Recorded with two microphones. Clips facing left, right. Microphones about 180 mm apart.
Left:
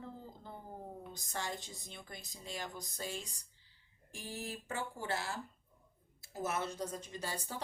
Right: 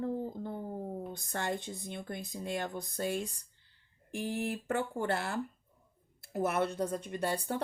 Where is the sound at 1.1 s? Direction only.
55° right (ahead or behind).